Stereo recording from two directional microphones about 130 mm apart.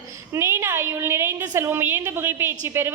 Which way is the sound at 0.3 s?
20° right (ahead or behind).